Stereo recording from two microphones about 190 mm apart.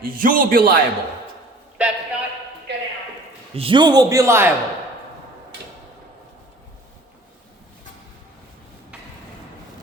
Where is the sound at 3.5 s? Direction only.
30° right (ahead or behind).